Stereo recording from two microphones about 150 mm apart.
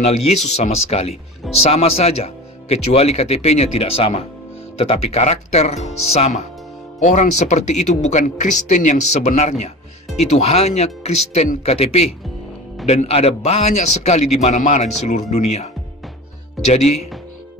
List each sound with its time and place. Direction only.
0.7 s a man's voice: 45° left (ahead or behind)
16.6 s speech: centre (ahead or behind)